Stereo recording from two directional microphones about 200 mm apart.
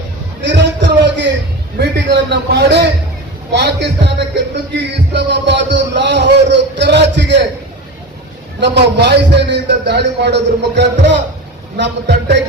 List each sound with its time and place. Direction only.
0.4 s a sound: 60° right (ahead or behind)
1.8 s a man's voice: 55° right (ahead or behind)
8.6 s a man's voice: 55° right (ahead or behind)